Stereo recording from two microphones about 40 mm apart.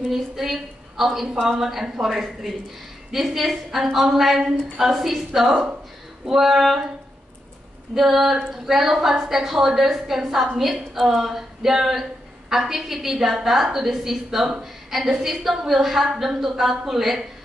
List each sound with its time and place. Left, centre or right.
0.1 s a woman's voice: centre
5.5 s speech: right
6.2 s a woman's voice: centre
7.9 s a woman's voice: centre